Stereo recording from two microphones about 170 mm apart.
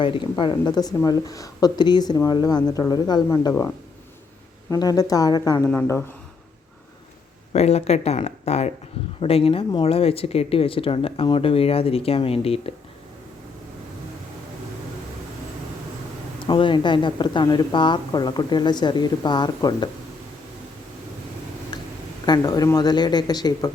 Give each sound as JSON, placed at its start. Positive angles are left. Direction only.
{"t": 0.0, "sound": "speech", "side_deg": 30}
{"t": 4.7, "sound": "speech", "side_deg": 20}
{"t": 5.6, "sound": "speech", "side_deg": 10}
{"t": 7.5, "sound": "speech", "side_deg": 40}
{"t": 16.5, "sound": "speech", "side_deg": 30}
{"t": 22.3, "sound": "speech", "side_deg": 20}